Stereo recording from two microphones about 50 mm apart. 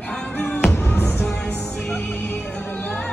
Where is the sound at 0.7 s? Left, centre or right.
Left.